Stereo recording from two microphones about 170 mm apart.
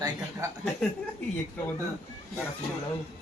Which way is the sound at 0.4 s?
20° right (ahead or behind).